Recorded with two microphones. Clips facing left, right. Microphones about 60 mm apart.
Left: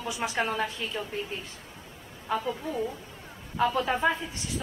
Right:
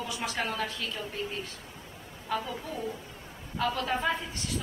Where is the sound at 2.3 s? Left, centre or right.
Centre.